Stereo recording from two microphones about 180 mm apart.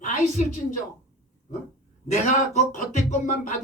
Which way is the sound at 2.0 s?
40° left (ahead or behind).